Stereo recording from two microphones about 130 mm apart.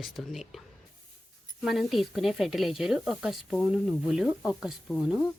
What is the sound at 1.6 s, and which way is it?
Speech, centre (ahead or behind).